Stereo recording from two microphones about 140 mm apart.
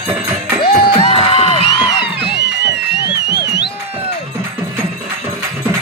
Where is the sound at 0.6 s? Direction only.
40° left (ahead or behind).